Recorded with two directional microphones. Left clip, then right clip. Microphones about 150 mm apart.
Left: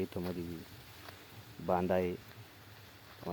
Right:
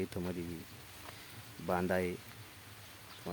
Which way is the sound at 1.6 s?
10° right (ahead or behind).